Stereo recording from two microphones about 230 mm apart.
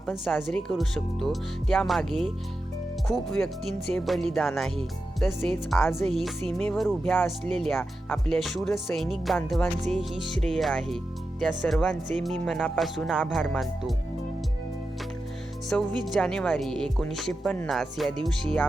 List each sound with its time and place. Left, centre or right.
0.0 s speech: centre
15.7 s speech: centre